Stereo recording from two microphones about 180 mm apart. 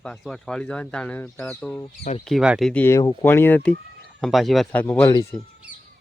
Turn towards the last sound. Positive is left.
turn(degrees=15)  # may be behind; listen again after turning